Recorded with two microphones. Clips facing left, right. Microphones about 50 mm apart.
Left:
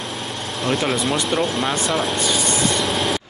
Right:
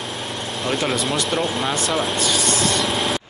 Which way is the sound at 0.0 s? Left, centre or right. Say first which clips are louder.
Even; centre.